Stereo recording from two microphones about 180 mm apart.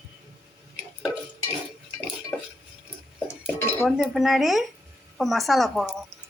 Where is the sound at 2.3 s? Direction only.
10° left (ahead or behind).